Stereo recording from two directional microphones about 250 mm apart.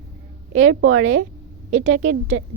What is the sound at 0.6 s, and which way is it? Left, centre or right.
A woman's voice, right.